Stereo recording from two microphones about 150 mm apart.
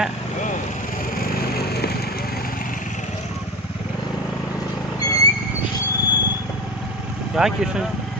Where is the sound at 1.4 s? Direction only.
90° left.